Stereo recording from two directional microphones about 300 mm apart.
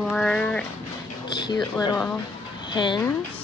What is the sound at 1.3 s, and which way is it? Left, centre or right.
A woman's voice, centre.